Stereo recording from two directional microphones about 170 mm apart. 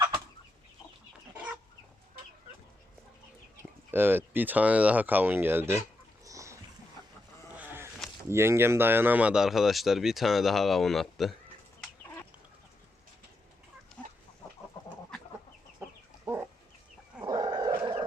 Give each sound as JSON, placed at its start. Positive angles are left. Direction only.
{"t": 3.9, "sound": "speech", "side_deg": -10}
{"t": 6.2, "sound": "a sound", "side_deg": -20}
{"t": 7.5, "sound": "sheep", "side_deg": -10}
{"t": 8.3, "sound": "speech", "side_deg": -15}
{"t": 14.0, "sound": "chicken", "side_deg": 10}
{"t": 15.8, "sound": "chicken", "side_deg": -10}
{"t": 16.2, "sound": "dog", "side_deg": -15}